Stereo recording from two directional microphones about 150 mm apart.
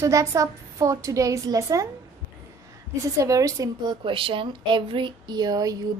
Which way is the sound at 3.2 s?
20° right (ahead or behind).